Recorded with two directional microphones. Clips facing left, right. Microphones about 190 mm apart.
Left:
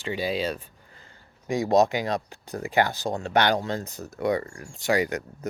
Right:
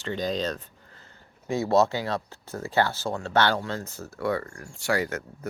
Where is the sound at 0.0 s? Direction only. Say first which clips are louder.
Left 1 dB; 10° left (ahead or behind).